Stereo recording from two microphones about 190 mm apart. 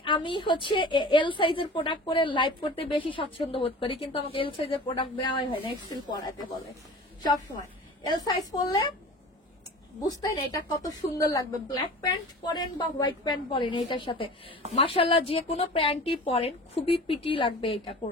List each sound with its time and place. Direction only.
0.0 s a woman's voice: 25° left (ahead or behind)
8.1 s a woman's voice: 20° left (ahead or behind)
10.0 s a woman's voice: 20° left (ahead or behind)